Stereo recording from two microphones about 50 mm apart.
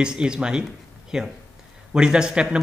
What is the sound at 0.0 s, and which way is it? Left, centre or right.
Speech, centre.